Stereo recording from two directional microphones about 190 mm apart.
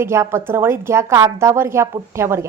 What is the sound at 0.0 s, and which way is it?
A woman's voice, 15° right (ahead or behind).